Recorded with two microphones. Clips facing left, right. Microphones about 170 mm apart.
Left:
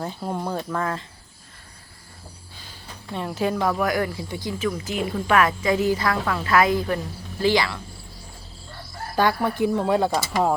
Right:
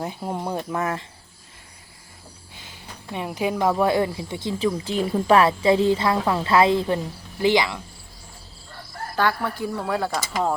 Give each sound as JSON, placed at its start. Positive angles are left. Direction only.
{"t": 0.0, "sound": "speech", "side_deg": -10}
{"t": 3.1, "sound": "speech", "side_deg": -10}
{"t": 9.1, "sound": "speech", "side_deg": 15}